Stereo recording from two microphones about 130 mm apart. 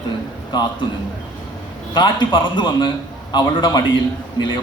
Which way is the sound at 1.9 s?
35° left (ahead or behind).